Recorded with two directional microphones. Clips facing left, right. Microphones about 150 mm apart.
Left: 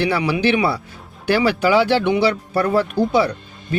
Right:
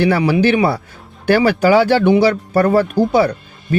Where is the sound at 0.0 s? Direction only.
45° right (ahead or behind).